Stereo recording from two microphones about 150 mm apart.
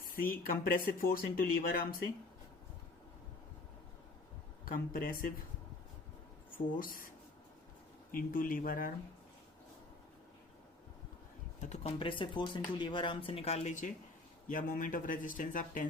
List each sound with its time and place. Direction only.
0.2 s speech: 70° left (ahead or behind)
4.6 s speech: 70° left (ahead or behind)
6.7 s speech: 70° left (ahead or behind)
8.1 s speech: 70° left (ahead or behind)
11.7 s speech: 45° left (ahead or behind)
14.4 s speech: 65° left (ahead or behind)